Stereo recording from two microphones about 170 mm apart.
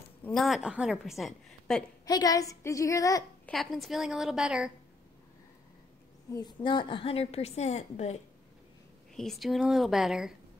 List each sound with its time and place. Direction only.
0.2 s a woman's voice: centre (ahead or behind)
2.0 s a woman's voice: 20° left (ahead or behind)
3.4 s a woman's voice: centre (ahead or behind)
6.3 s a woman's voice: 25° left (ahead or behind)
9.1 s a woman's voice: centre (ahead or behind)